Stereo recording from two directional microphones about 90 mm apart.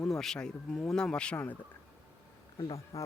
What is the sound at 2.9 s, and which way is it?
Speech, 35° left (ahead or behind).